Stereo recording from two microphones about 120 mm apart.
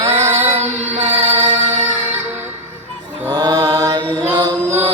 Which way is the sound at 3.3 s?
35° right (ahead or behind).